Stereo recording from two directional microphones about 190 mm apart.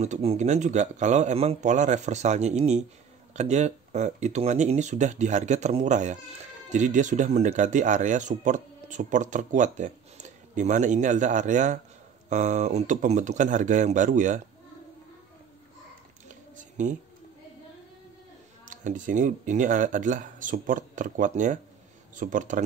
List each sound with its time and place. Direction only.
0.0 s speech: 35° right (ahead or behind)
16.5 s a sound: 40° right (ahead or behind)
18.7 s speech: 40° right (ahead or behind)